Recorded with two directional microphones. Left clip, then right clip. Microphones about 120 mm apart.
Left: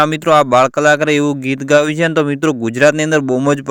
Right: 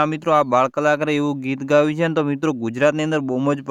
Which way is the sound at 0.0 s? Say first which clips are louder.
Left 6 dB; 30° left (ahead or behind).